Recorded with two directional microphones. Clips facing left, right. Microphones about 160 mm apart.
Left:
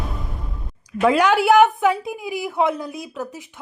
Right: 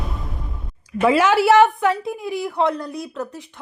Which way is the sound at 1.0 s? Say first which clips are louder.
Right 1 dB; centre (ahead or behind).